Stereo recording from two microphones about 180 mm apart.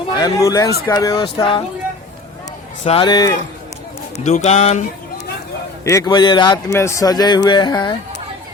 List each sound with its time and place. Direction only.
0.2 s a man's voice: 20° left (ahead or behind)
2.8 s a man's voice: 30° left (ahead or behind)
4.2 s speech: 40° left (ahead or behind)
5.8 s a man's voice: 15° left (ahead or behind)